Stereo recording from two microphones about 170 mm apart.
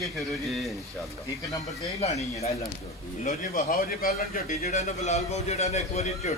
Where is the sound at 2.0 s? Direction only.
40° left (ahead or behind).